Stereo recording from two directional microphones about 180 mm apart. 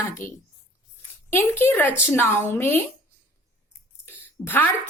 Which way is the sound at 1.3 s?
15° left (ahead or behind).